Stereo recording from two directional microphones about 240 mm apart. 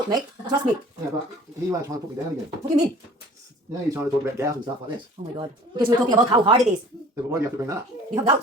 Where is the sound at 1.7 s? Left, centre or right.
Centre.